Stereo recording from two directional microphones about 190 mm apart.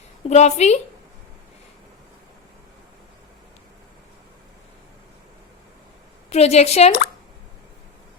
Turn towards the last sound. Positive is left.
turn(degrees=35)  # may be behind; listen again after turning